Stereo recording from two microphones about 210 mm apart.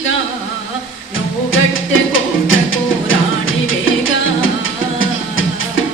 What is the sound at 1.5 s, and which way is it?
Music, 70° left (ahead or behind).